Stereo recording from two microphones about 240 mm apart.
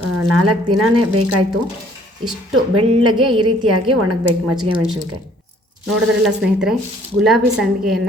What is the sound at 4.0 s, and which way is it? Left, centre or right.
Speech, right.